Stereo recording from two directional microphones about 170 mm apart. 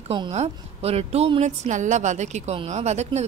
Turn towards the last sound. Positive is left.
turn(degrees=-40)  # may be behind; listen again after turning